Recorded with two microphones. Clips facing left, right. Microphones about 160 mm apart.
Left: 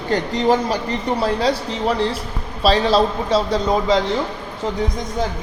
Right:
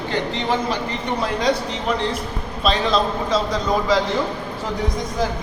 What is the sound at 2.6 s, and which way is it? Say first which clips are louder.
Speech: left 4 dB; 35° left (ahead or behind).